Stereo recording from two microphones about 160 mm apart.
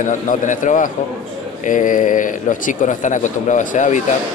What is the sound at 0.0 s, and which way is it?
Speech, 50° left (ahead or behind).